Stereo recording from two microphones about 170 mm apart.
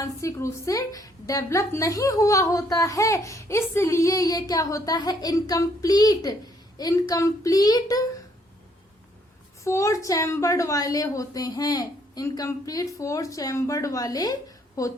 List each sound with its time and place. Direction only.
0.0 s a woman's voice: 15° left (ahead or behind)
9.6 s a woman's voice: 20° left (ahead or behind)